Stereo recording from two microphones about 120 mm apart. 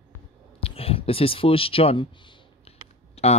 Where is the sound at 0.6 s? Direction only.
55° left (ahead or behind).